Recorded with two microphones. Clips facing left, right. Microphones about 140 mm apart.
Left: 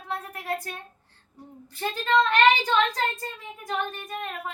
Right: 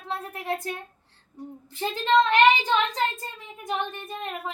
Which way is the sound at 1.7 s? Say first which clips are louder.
Right 2 dB; 20° right (ahead or behind).